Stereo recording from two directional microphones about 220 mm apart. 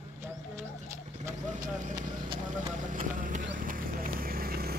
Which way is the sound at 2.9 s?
35° right (ahead or behind).